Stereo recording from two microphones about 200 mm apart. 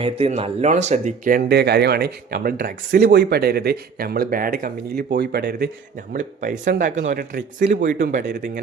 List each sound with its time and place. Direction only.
0.0 s speech: 30° right (ahead or behind); by 5.7 s 55° right (ahead or behind)
6.1 s speech: 40° right (ahead or behind)
7.2 s speech: 55° right (ahead or behind)
7.7 s speech: 40° right (ahead or behind)